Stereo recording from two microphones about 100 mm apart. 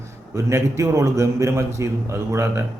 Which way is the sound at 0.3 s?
30° right (ahead or behind).